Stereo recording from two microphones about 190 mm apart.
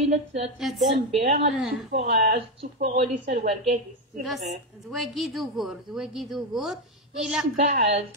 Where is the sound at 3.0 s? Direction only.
35° right (ahead or behind).